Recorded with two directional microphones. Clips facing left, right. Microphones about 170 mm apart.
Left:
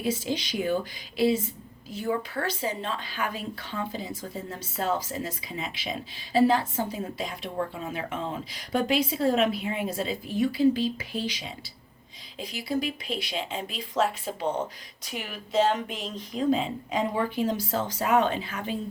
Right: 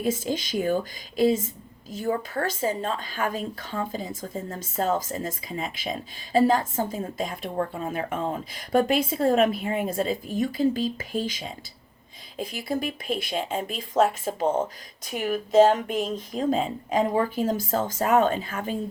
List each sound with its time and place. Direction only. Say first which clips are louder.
0.0 s a woman's voice: right 2 dB; 45° right (ahead or behind)